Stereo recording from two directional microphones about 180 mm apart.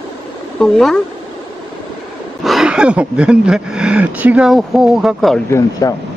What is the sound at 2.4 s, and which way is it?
Speech, centre (ahead or behind).